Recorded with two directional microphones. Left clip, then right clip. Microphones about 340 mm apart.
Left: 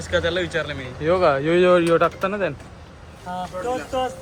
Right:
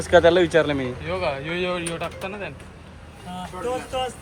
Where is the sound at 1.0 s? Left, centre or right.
Left.